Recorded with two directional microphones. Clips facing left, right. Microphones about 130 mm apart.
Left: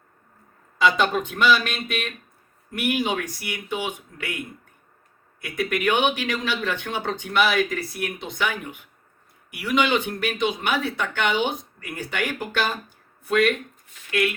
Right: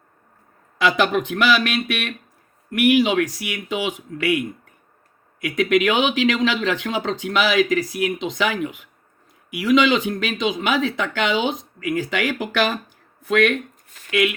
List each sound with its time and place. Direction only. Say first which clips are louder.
0.8 s speech: right 2 dB; 85° right
2.6 s speech: right 8 dB; 85° right